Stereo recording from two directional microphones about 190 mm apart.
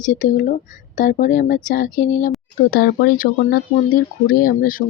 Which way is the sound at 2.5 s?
55° left (ahead or behind).